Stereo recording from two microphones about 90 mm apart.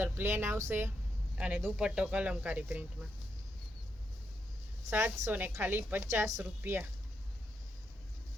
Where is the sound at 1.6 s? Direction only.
15° right (ahead or behind).